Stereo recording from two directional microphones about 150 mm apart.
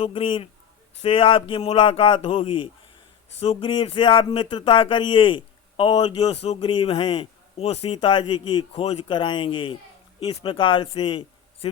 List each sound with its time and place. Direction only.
0.0 s speech: 35° left (ahead or behind)
7.6 s a man's voice: 40° left (ahead or behind)